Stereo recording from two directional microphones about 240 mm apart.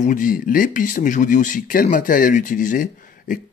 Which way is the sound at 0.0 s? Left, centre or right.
Left.